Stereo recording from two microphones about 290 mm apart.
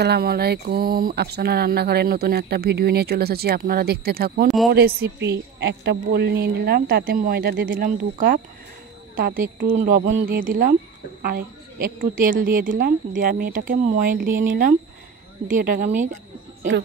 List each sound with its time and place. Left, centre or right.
0.0 s a woman's voice: right